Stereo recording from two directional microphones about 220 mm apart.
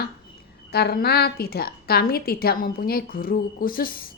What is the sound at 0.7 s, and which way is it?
A woman's voice, 45° left (ahead or behind).